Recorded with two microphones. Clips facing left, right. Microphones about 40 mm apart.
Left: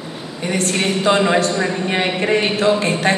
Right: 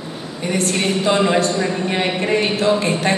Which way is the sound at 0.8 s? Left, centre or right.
Left.